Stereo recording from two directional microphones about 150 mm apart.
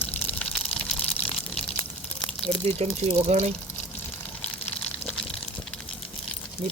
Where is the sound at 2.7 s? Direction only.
45° right (ahead or behind).